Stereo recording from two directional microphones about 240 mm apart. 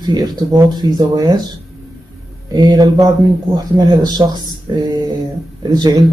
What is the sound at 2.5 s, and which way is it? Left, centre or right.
Speech, centre.